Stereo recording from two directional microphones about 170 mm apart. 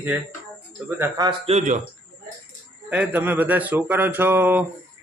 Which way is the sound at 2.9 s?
10° right (ahead or behind).